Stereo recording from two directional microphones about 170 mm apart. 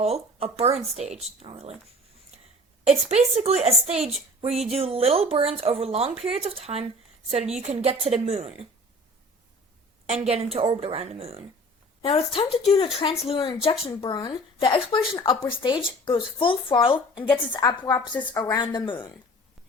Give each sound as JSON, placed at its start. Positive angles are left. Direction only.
{"t": 0.0, "sound": "speech", "side_deg": -35}
{"t": 3.1, "sound": "speech", "side_deg": -40}
{"t": 10.1, "sound": "speech", "side_deg": -35}
{"t": 12.0, "sound": "speech", "side_deg": 30}